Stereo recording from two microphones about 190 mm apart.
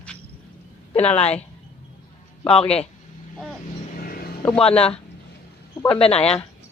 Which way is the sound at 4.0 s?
50° left (ahead or behind).